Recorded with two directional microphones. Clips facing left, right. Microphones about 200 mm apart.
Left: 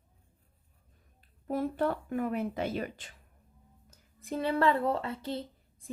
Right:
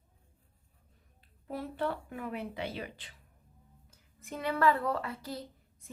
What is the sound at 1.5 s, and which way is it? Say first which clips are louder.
Speech: left 5 dB; 45° left (ahead or behind).